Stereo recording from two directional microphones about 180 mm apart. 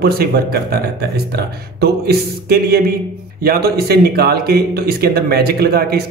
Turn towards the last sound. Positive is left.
turn(degrees=-60)  # may be behind; listen again after turning